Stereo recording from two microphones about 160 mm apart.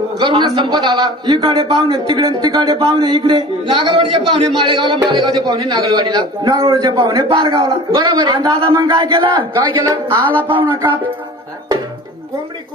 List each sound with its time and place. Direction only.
0.2 s a man's voice: 30° right (ahead or behind)
10.5 s music: 30° right (ahead or behind)